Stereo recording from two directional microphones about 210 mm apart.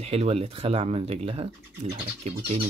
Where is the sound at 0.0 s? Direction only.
30° right (ahead or behind).